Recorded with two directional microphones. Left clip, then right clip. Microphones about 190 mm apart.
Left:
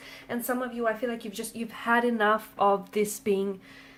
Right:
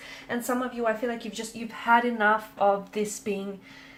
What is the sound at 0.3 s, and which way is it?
Speech, 30° left (ahead or behind).